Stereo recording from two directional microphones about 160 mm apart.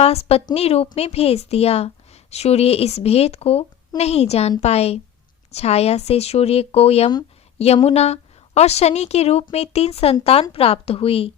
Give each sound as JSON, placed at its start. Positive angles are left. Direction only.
{"t": 0.0, "sound": "a woman's voice", "side_deg": 40}